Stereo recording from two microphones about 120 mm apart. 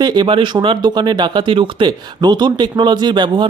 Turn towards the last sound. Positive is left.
turn(degrees=-40)  # may be behind; listen again after turning